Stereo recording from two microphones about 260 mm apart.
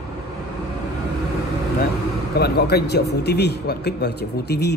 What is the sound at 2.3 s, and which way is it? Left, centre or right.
A man's voice, left.